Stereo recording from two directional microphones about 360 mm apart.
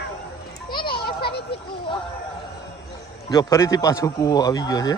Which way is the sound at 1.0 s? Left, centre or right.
Left.